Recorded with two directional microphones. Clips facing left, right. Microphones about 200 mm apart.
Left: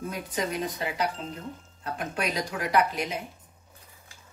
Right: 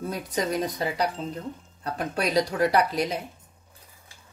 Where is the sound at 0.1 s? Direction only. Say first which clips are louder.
Right 5 dB; 40° right (ahead or behind).